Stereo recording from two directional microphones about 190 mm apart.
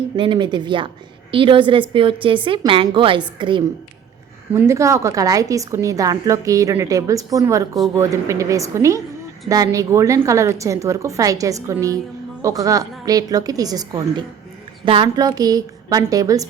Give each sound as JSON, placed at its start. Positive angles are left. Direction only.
{"t": 0.2, "sound": "a woman's voice", "side_deg": -25}
{"t": 4.5, "sound": "a woman's voice", "side_deg": -15}